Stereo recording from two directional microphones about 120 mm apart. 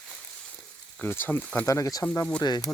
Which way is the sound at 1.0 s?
15° left (ahead or behind).